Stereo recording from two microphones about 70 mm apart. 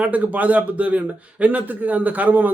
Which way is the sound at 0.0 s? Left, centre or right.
Right.